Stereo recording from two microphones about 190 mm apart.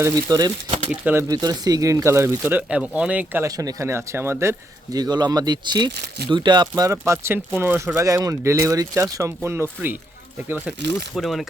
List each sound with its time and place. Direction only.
0.0 s speech: 20° right (ahead or behind)
0.9 s speech: 10° right (ahead or behind)
1.3 s speech: 20° right (ahead or behind)
11.1 s speech: centre (ahead or behind)